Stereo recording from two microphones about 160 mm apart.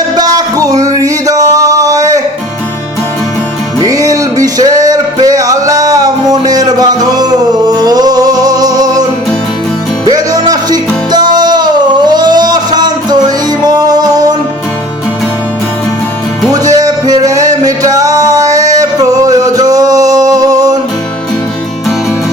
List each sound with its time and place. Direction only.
0.2 s music: 25° right (ahead or behind)
3.8 s music: 20° right (ahead or behind)
10.1 s music: 25° right (ahead or behind)
16.5 s music: 20° right (ahead or behind)